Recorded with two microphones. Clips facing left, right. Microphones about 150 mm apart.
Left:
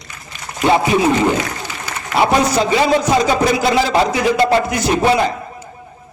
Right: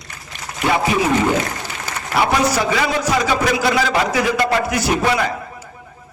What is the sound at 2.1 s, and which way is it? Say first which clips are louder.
Speech: left 3 dB; 20° left (ahead or behind).